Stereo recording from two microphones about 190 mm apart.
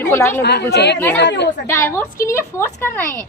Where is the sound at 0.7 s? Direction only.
60° left (ahead or behind).